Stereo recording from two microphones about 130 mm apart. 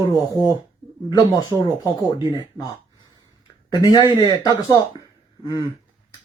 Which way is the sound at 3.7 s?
35° left (ahead or behind).